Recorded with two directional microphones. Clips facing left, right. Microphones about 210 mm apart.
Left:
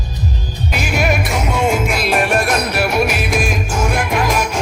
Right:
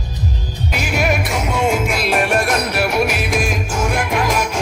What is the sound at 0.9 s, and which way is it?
Music, 10° left (ahead or behind).